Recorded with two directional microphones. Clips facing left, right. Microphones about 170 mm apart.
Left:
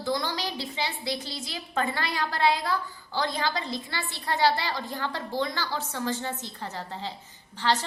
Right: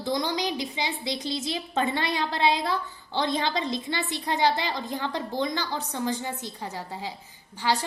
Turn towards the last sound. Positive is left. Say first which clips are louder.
# even
turn(degrees=-10)  # may be behind; listen again after turning